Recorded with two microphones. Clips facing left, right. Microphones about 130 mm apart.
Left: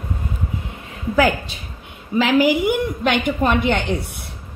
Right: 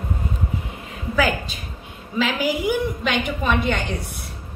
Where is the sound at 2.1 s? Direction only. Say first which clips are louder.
Left 6 dB; 65° left (ahead or behind).